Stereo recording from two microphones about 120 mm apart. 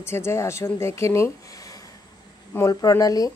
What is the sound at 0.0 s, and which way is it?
Speech, 20° left (ahead or behind).